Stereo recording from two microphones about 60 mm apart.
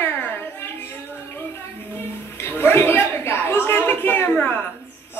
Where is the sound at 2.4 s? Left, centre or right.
Left.